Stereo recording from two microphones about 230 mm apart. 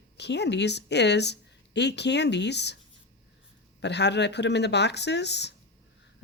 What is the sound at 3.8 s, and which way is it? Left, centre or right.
Speech, left.